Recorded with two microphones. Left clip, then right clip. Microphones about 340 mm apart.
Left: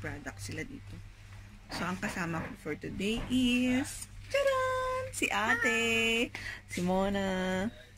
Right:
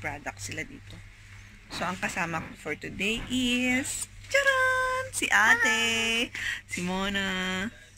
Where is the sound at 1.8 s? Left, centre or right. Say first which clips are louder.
Right 6 dB; centre.